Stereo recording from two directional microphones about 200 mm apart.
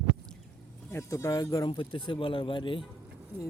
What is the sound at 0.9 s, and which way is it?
Speech, 15° left (ahead or behind).